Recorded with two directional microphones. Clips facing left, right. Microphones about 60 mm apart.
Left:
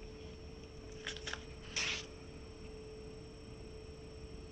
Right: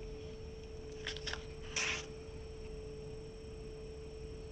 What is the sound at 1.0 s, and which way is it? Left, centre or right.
Biting, centre.